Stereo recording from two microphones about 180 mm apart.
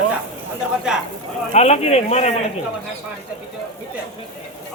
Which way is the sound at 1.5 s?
35° left (ahead or behind).